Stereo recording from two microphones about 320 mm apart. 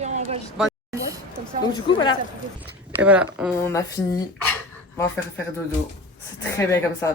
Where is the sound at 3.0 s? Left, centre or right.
Centre.